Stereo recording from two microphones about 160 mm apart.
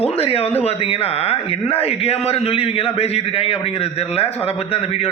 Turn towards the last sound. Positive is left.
turn(degrees=35)  # may be behind; listen again after turning